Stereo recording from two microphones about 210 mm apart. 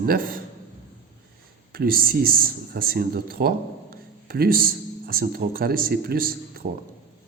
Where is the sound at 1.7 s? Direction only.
45° right (ahead or behind).